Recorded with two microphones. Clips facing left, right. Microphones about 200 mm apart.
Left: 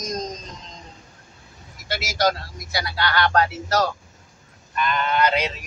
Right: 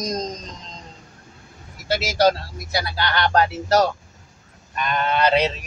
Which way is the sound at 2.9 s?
30° right (ahead or behind).